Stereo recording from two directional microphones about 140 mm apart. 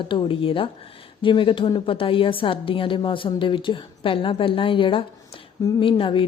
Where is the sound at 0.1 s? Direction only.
35° left (ahead or behind).